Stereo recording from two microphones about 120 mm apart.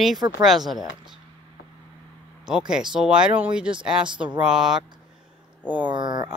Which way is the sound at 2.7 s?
5° right (ahead or behind).